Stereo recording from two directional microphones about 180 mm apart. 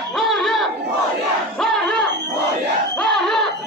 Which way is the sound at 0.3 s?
Centre (ahead or behind).